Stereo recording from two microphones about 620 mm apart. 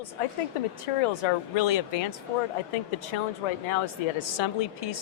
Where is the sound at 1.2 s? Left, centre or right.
Left.